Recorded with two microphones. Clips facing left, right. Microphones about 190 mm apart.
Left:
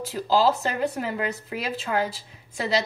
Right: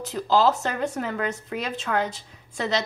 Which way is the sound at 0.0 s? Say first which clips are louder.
Even; 10° left (ahead or behind).